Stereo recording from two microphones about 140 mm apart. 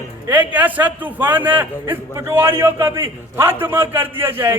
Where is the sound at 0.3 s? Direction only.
10° right (ahead or behind).